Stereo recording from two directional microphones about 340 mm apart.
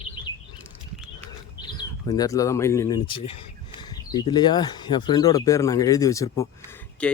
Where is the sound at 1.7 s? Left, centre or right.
Centre.